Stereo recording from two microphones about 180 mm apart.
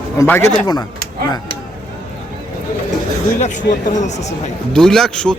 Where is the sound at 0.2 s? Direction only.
15° left (ahead or behind).